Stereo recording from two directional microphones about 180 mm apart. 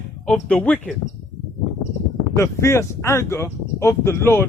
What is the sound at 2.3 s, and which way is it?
Speech, 15° left (ahead or behind).